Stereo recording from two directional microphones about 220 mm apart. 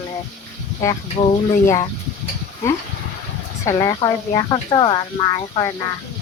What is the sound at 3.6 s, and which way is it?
Speech, 15° left (ahead or behind).